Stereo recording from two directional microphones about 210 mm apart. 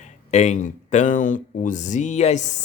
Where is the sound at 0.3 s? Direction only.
35° left (ahead or behind).